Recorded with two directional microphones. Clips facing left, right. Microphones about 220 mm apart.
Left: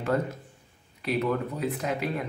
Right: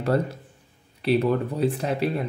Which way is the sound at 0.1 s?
35° right (ahead or behind).